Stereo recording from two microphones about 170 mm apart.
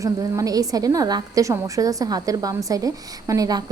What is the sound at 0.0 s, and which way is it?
A woman's voice, 20° right (ahead or behind).